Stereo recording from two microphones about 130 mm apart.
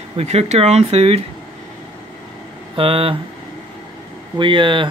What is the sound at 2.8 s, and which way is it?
Speech, 45° right (ahead or behind).